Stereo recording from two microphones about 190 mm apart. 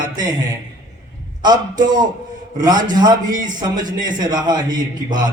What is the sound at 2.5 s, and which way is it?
A man's voice, 20° right (ahead or behind).